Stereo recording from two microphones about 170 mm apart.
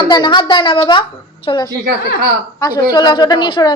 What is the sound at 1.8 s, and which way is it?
Speech, 65° right (ahead or behind).